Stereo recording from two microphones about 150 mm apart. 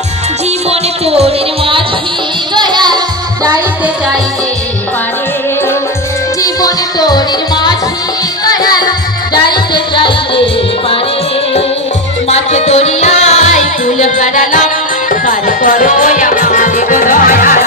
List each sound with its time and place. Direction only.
0.7 s music: 45° right (ahead or behind)
2.5 s music: 30° right (ahead or behind)
6.4 s music: 25° left (ahead or behind)
12.3 s music: 45° left (ahead or behind); by 17.6 s 65° left (ahead or behind)